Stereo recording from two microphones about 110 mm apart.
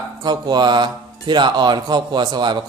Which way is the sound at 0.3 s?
40° right (ahead or behind).